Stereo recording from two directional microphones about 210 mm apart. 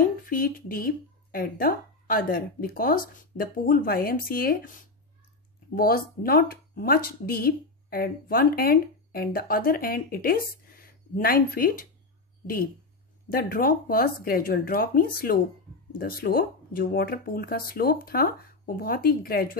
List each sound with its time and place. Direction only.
0.0 s speech: 40° left (ahead or behind)
13.3 s speech: 45° left (ahead or behind)